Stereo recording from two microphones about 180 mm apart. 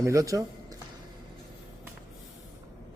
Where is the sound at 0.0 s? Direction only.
15° right (ahead or behind).